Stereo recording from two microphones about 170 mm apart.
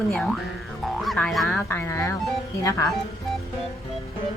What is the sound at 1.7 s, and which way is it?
Speech, 15° left (ahead or behind).